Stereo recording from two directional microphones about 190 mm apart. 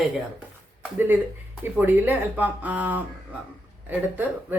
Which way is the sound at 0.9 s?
10° right (ahead or behind).